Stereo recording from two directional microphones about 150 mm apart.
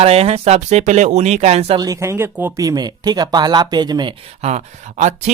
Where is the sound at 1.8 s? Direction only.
20° right (ahead or behind).